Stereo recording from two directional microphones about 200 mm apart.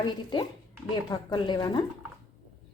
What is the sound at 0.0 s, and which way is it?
A woman's voice, 20° left (ahead or behind).